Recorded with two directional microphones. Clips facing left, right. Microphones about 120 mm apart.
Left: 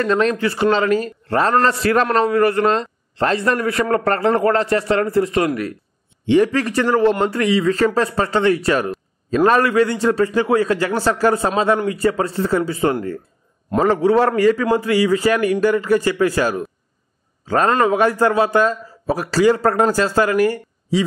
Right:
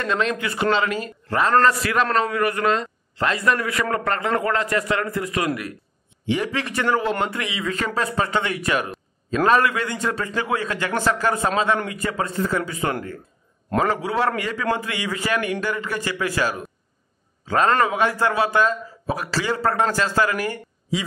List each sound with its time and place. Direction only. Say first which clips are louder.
0.0 s a man's voice: left 6 dB; 40° left (ahead or behind)
17.8 s a man's voice: left 6 dB; 45° left (ahead or behind)